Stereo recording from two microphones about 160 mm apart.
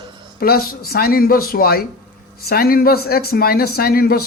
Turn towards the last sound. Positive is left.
turn(degrees=70)  # may be behind; listen again after turning